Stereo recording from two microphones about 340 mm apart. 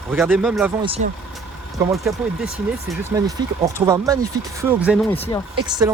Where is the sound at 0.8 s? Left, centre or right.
Centre.